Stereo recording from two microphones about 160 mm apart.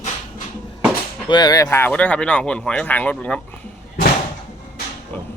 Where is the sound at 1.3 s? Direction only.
25° left (ahead or behind); by 3.4 s 10° left (ahead or behind).